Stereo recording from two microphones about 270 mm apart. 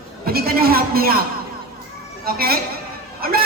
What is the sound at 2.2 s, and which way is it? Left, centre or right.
A woman's voice, right.